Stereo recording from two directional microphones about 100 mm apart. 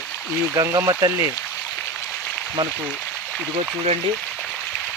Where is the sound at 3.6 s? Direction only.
90° right.